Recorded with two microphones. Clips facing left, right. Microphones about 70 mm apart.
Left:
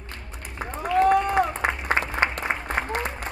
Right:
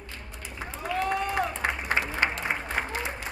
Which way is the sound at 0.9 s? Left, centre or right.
Left.